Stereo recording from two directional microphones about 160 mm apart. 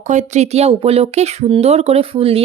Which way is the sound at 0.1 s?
45° right (ahead or behind).